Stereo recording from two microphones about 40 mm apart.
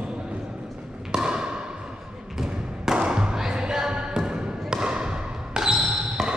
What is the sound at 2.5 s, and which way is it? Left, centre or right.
Thump, right.